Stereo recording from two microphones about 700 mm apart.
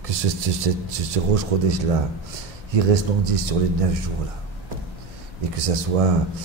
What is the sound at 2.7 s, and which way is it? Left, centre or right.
Speech, right.